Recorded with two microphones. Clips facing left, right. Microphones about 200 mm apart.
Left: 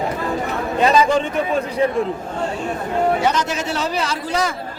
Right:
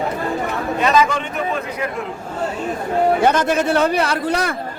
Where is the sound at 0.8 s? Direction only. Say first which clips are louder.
Left 2 dB; 30° left (ahead or behind).